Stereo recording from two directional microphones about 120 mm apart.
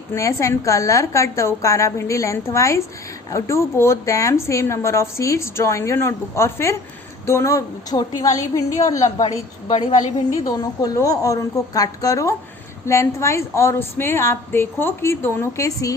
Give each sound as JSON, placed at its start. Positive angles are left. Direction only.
{"t": 0.1, "sound": "a woman's voice", "side_deg": 25}
{"t": 9.7, "sound": "a woman's voice", "side_deg": 90}
{"t": 10.3, "sound": "a woman's voice", "side_deg": 30}